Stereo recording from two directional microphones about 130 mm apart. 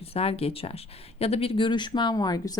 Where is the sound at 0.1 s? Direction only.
50° left (ahead or behind).